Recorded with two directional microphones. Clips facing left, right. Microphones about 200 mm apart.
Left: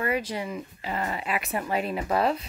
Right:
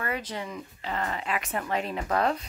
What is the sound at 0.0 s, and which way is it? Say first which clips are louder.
Speech: left 5 dB; 10° left (ahead or behind).